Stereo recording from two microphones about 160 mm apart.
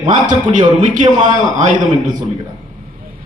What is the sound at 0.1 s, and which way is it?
A man's voice, 50° right (ahead or behind).